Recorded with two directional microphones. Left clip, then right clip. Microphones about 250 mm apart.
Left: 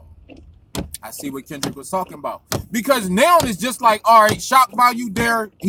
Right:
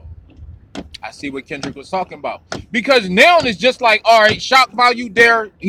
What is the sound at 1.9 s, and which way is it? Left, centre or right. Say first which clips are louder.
Speech: right 3 dB; left.